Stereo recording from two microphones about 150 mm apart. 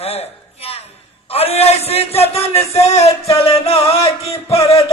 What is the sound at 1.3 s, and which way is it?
A man's voice, 40° left (ahead or behind).